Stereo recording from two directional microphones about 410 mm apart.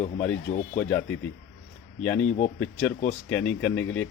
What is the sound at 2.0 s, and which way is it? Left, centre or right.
Speech, centre.